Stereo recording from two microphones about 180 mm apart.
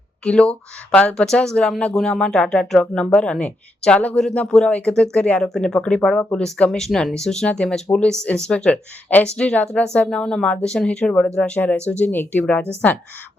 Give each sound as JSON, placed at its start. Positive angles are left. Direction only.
{"t": 0.3, "sound": "speech", "side_deg": 5}